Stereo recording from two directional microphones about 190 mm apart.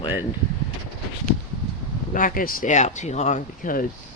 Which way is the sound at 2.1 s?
45° left (ahead or behind).